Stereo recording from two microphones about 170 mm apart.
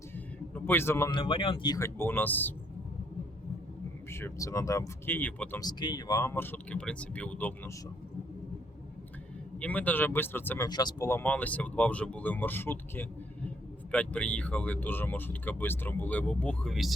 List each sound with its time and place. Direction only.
0.5 s speech: 10° left (ahead or behind)
1.1 s speech: 30° left (ahead or behind); by 2.5 s 10° left (ahead or behind)
4.1 s speech: 15° left (ahead or behind)
5.6 s speech: 25° left (ahead or behind)
9.6 s speech: 10° left (ahead or behind)
10.7 s speech: 25° left (ahead or behind); by 16.9 s centre (ahead or behind)